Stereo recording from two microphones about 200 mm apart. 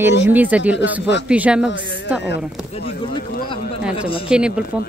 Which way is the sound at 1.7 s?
65° left (ahead or behind).